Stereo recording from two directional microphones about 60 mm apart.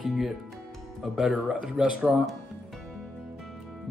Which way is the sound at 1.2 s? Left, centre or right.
Right.